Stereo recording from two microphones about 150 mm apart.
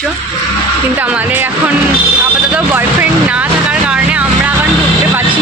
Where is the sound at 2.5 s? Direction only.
10° right (ahead or behind).